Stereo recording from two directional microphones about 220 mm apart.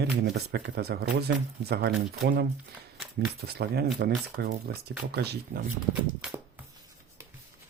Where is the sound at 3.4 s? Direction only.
45° right (ahead or behind).